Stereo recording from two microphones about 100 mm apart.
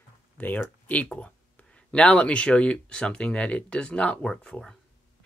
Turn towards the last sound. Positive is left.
turn(degrees=5)  # may be behind; listen again after turning